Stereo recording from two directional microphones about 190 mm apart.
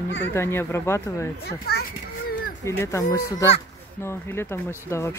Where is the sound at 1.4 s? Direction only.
60° left (ahead or behind).